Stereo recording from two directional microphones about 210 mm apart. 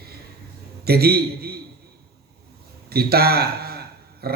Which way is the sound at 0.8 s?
50° right (ahead or behind).